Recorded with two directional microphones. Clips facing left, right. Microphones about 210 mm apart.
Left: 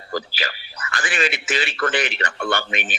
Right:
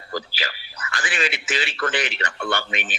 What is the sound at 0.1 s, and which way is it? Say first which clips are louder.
A man's voice: left 3 dB; 50° left (ahead or behind).